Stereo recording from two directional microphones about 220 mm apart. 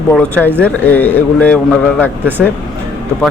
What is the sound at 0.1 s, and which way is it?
A man's voice, 5° left (ahead or behind).